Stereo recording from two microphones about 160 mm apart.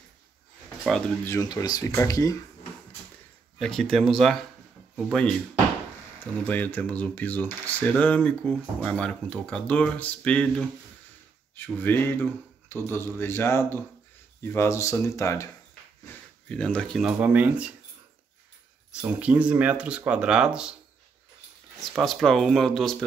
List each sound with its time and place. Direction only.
1.2 s speech: 20° left (ahead or behind)
3.5 s speech: 5° left (ahead or behind)
6.4 s speech: 10° left (ahead or behind)
16.4 s speech: 5° left (ahead or behind)
18.9 s speech: 10° right (ahead or behind)
21.9 s speech: centre (ahead or behind)